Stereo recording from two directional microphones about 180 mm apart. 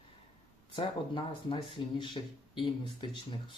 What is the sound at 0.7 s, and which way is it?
Speech, 30° left (ahead or behind).